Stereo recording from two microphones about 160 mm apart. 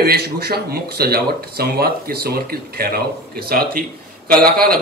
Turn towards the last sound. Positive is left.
turn(degrees=-70)  # may be behind; listen again after turning